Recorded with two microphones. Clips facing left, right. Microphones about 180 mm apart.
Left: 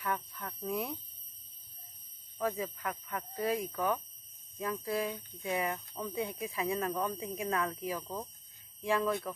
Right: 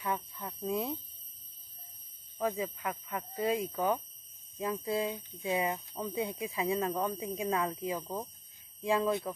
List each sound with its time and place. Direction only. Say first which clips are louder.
0.0 s speech: right 1 dB; 20° right (ahead or behind)
2.3 s speech: right 1 dB; 15° right (ahead or behind)